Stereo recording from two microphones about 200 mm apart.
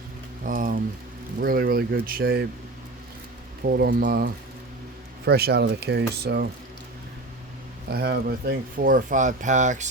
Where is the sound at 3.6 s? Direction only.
50° right (ahead or behind).